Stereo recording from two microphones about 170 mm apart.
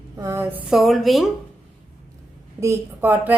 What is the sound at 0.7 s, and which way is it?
Speech, centre (ahead or behind).